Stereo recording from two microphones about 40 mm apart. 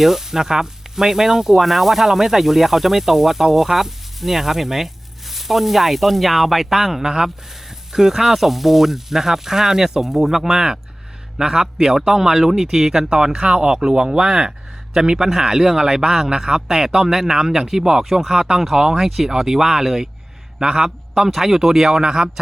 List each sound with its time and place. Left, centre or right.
0.0 s speech: centre
16.0 s speech: centre